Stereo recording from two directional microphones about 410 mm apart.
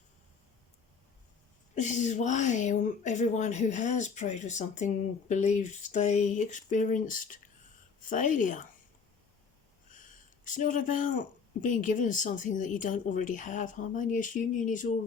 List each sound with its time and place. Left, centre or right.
1.7 s speech: centre
9.9 s speech: centre